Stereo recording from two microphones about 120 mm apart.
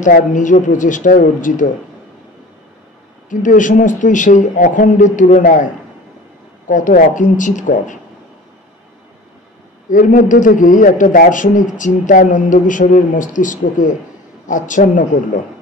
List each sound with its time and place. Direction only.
0.0 s a man's voice: 90° left
3.3 s a man's voice: 90° left
6.7 s a man's voice: 90° left
9.8 s a man's voice: 90° left